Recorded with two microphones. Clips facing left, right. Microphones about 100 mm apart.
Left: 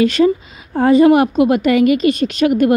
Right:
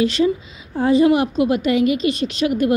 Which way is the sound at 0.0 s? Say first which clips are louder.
Left 5 dB; 55° left (ahead or behind).